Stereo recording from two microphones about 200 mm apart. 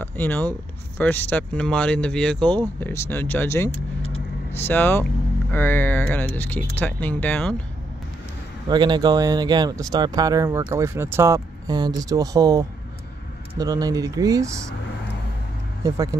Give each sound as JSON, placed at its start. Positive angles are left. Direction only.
{"t": 0.0, "sound": "speech", "side_deg": 10}
{"t": 4.0, "sound": "vehicle", "side_deg": 30}
{"t": 4.6, "sound": "speech", "side_deg": 10}
{"t": 8.6, "sound": "speech", "side_deg": -20}
{"t": 15.8, "sound": "speech", "side_deg": -15}